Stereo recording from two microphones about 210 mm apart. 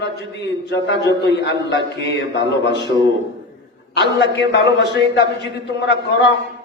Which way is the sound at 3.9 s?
55° left (ahead or behind).